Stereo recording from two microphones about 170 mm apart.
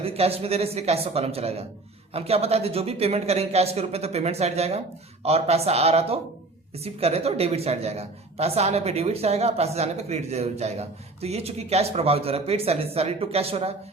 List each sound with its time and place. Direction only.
0.0 s a woman's voice: 35° right (ahead or behind)